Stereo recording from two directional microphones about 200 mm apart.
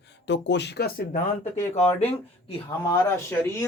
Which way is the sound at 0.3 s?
60° left (ahead or behind).